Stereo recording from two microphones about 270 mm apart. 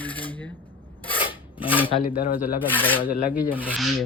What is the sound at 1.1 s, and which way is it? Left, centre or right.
Rub, centre.